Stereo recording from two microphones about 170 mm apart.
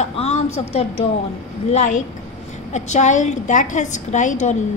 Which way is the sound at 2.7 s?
45° left (ahead or behind).